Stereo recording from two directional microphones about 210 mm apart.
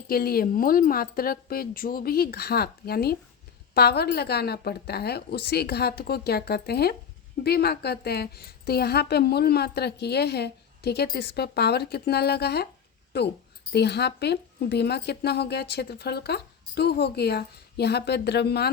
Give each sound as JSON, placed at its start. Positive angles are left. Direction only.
{"t": 0.1, "sound": "a woman's voice", "side_deg": 45}
{"t": 13.7, "sound": "a woman's voice", "side_deg": 50}